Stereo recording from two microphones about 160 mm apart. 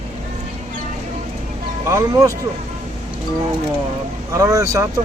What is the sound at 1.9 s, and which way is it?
Speech, 20° right (ahead or behind).